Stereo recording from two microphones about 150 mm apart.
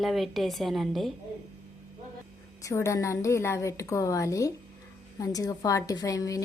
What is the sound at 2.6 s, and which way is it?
A woman's voice, 20° left (ahead or behind).